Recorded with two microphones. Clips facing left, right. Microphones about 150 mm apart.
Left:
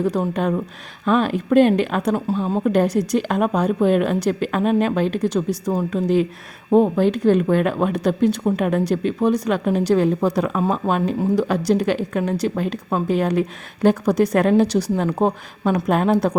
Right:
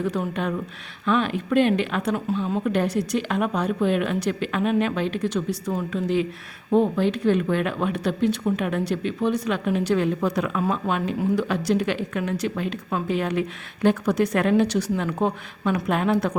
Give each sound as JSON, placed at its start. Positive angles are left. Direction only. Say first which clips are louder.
{"t": 0.0, "sound": "speech", "louder": "left 5 dB", "side_deg": 40}